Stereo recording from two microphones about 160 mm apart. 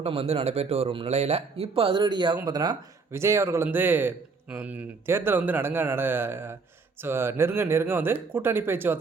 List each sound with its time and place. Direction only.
0.0 s a man's voice: 40° right (ahead or behind); by 9.0 s 15° right (ahead or behind)